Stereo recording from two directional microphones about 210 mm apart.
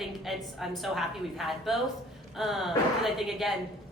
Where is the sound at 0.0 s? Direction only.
Centre (ahead or behind).